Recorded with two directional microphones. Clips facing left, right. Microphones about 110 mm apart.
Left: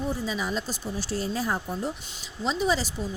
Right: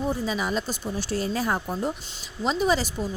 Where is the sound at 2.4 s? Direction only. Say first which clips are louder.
Right 2 dB; 55° right (ahead or behind).